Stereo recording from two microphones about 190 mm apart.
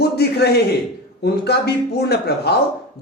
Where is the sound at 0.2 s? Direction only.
60° left (ahead or behind).